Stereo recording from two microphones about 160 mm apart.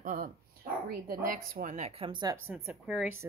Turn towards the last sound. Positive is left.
turn(degrees=0)  # may be behind; listen again after turning